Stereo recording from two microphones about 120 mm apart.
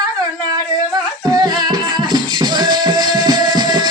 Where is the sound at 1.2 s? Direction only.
35° right (ahead or behind).